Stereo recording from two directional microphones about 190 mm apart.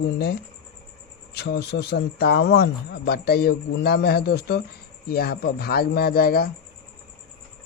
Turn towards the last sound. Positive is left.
turn(degrees=50)  # may be behind; listen again after turning